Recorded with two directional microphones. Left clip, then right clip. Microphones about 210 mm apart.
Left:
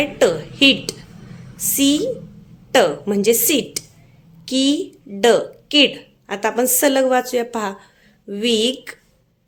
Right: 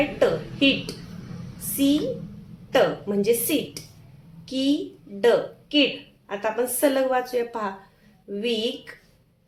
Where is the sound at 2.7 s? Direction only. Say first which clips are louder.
Left 5 dB; 50° left (ahead or behind).